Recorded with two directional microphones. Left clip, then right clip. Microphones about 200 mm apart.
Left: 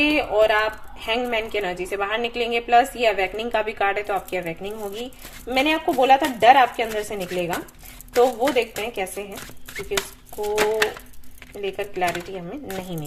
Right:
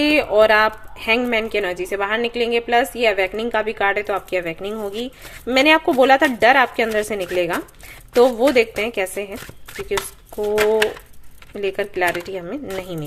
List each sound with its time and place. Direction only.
0.0 s a woman's voice: 35° right (ahead or behind)
11.8 s speech: 35° right (ahead or behind)